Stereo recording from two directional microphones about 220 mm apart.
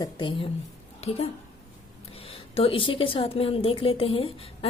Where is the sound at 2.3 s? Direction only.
25° left (ahead or behind).